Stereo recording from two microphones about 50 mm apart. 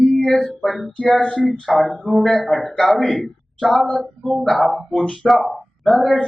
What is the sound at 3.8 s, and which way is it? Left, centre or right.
A man's voice, centre.